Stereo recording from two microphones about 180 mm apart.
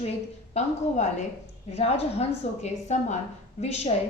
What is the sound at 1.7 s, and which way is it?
A woman's voice, 35° left (ahead or behind).